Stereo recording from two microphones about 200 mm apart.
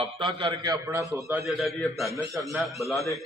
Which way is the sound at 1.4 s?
Centre (ahead or behind).